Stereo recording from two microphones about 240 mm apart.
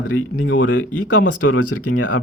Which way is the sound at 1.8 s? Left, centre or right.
Left.